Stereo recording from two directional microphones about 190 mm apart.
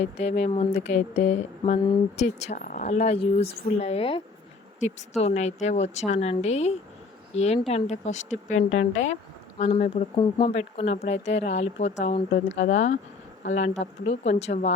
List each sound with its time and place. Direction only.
0.0 s speech: 35° left (ahead or behind)